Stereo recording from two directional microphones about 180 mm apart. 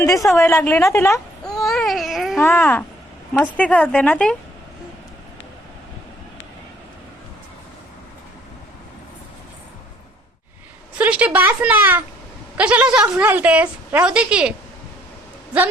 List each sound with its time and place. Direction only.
0.5 s a woman's voice: 10° left (ahead or behind)
1.6 s baby cry: centre (ahead or behind)
2.4 s speech: 10° left (ahead or behind)
10.9 s a woman's voice: 5° right (ahead or behind)